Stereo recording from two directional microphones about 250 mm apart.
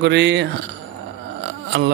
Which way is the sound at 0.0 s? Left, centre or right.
Right.